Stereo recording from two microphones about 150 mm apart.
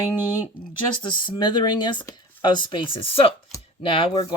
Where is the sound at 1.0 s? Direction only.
30° left (ahead or behind).